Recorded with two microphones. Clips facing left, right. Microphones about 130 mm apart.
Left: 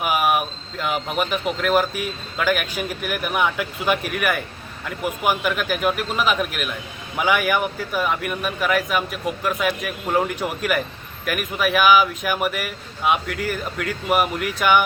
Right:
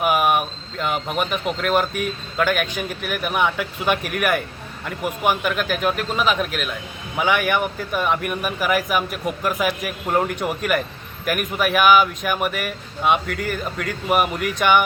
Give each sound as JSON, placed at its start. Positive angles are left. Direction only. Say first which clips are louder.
{"t": 0.0, "sound": "speech", "louder": "right 2 dB", "side_deg": 0}